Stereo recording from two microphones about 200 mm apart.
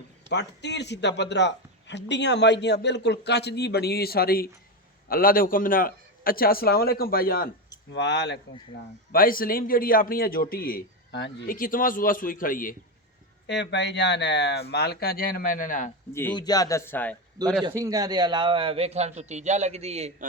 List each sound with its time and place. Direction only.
0.3 s a man's voice: 60° left (ahead or behind)
7.9 s speech: 60° left (ahead or behind)
9.1 s a man's voice: 45° left (ahead or behind); by 11.5 s 60° left (ahead or behind)
11.5 s a man's voice: 45° left (ahead or behind)
13.5 s speech: 60° left (ahead or behind); by 15.9 s 40° left (ahead or behind)
16.3 s a man's voice: 20° left (ahead or behind)
17.6 s a man's voice: 20° right (ahead or behind)